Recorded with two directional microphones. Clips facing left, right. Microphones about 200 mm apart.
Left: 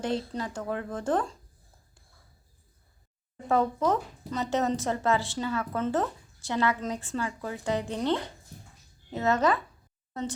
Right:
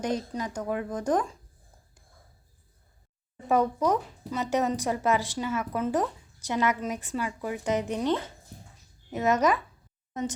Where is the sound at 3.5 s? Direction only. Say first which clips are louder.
Right 1 dB; 15° right (ahead or behind).